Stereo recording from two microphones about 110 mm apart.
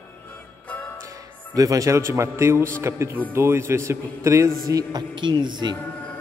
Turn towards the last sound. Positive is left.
turn(degrees=-40)  # may be behind; listen again after turning